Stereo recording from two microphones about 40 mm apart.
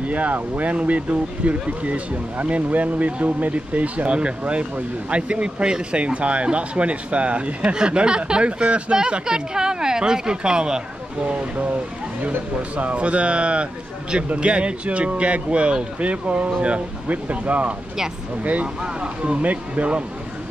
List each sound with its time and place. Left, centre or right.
0.0 s speech: right
7.7 s speech: right
8.9 s speech: centre
11.2 s speech: right
18.8 s speech: right